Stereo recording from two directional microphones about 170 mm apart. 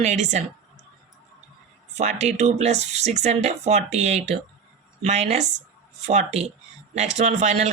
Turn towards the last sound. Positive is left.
turn(degrees=-40)  # may be behind; listen again after turning